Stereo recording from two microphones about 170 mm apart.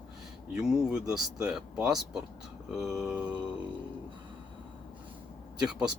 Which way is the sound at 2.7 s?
5° right (ahead or behind).